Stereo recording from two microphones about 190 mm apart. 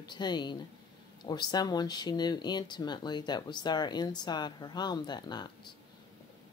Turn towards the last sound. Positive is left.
turn(degrees=20)  # may be behind; listen again after turning